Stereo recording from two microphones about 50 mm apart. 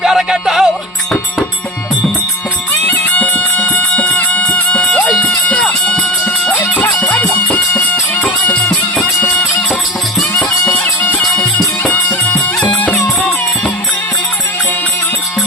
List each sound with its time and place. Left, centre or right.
0.0 s music: centre
2.8 s music: left
3.6 s music: left
6.7 s music: left
10.7 s music: left
12.6 s music: left